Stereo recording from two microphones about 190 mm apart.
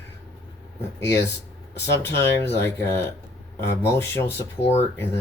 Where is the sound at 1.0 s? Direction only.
15° left (ahead or behind).